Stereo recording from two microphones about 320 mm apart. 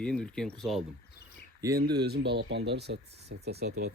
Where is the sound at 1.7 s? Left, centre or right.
Right.